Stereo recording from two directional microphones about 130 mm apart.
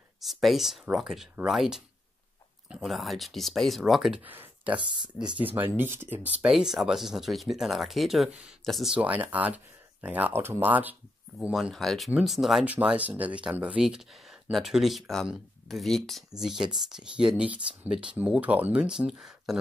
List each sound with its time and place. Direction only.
0.2 s speech: centre (ahead or behind)
4.2 s speech: 15° right (ahead or behind)
4.7 s speech: 35° right (ahead or behind)
5.4 s speech: 15° right (ahead or behind)
11.5 s speech: centre (ahead or behind)